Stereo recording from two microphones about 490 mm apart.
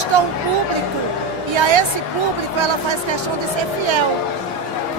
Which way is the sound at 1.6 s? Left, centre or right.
Right.